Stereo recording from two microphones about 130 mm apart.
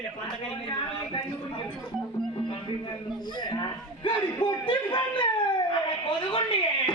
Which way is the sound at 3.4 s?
35° left (ahead or behind).